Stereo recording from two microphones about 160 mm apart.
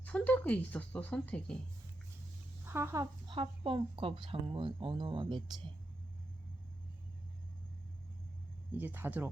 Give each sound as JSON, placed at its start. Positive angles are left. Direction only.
{"t": 0.0, "sound": "a woman's voice", "side_deg": 10}
{"t": 2.6, "sound": "speech", "side_deg": -15}
{"t": 8.7, "sound": "speech", "side_deg": -10}